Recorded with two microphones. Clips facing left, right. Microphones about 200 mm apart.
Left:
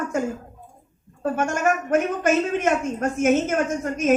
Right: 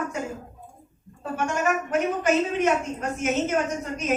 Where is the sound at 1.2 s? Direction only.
50° left (ahead or behind).